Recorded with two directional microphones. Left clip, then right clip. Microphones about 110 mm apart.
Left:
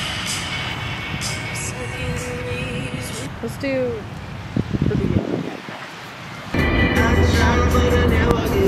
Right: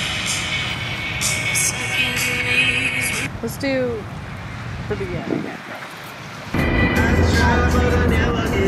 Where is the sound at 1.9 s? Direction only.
40° right (ahead or behind).